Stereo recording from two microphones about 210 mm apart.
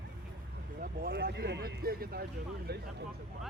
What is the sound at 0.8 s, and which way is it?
Speech, 45° right (ahead or behind).